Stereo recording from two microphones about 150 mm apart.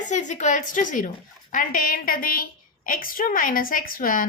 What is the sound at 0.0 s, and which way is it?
A woman's voice, 55° left (ahead or behind).